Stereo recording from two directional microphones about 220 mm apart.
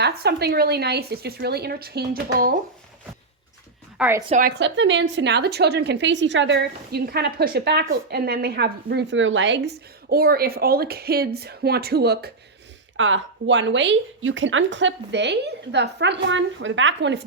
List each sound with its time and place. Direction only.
0.0 s a woman's voice: 45° right (ahead or behind)
3.9 s a woman's voice: 5° right (ahead or behind)
4.3 s a woman's voice: 40° right (ahead or behind)
13.0 s speech: 60° right (ahead or behind)